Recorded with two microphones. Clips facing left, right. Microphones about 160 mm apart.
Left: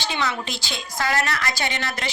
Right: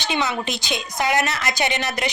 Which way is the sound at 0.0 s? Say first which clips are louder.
Right 3 dB; 20° right (ahead or behind).